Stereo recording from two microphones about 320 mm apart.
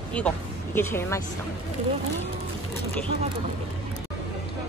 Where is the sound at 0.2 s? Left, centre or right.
Centre.